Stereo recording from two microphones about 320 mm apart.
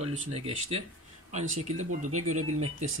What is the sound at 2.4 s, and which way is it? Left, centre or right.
Speech, right.